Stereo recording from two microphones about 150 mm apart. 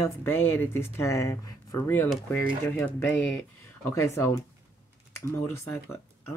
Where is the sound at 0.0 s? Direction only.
15° left (ahead or behind).